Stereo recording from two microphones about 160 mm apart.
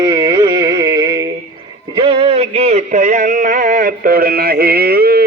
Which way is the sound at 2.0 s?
40° right (ahead or behind).